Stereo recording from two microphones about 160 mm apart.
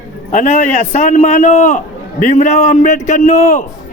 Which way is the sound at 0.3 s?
50° left (ahead or behind).